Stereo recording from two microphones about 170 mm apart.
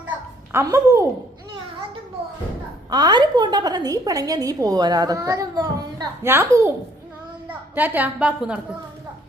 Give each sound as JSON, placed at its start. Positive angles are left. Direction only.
{"t": 0.5, "sound": "a woman's voice", "side_deg": -15}
{"t": 2.9, "sound": "a woman's voice", "side_deg": -25}